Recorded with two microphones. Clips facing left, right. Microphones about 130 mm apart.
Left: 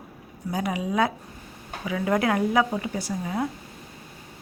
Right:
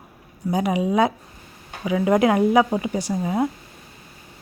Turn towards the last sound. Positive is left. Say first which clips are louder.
# right 5 dB
turn(degrees=-20)  # may be behind; listen again after turning